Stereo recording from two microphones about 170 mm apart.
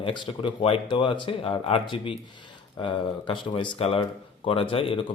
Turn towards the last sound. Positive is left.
turn(degrees=30)  # may be behind; listen again after turning